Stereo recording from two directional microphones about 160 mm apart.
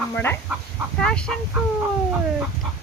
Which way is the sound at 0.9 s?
5° left (ahead or behind).